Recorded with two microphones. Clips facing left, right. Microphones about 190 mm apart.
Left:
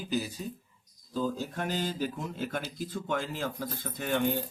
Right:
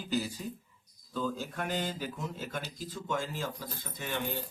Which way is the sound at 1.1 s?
35° left (ahead or behind).